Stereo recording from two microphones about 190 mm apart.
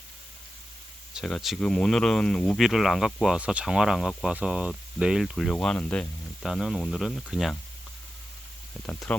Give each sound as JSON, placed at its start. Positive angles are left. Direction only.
{"t": 1.1, "sound": "speech", "side_deg": 0}
{"t": 8.9, "sound": "speech", "side_deg": 5}